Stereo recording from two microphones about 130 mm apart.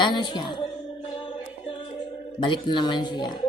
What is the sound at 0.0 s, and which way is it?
Speech, 35° left (ahead or behind).